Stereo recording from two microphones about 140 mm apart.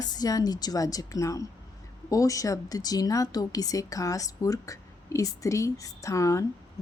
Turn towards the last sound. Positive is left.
turn(degrees=20)  # may be behind; listen again after turning